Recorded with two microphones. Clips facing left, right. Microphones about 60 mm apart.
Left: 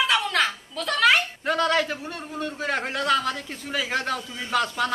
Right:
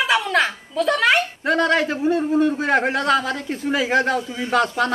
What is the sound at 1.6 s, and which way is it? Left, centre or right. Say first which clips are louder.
Speech: right 4 dB; centre.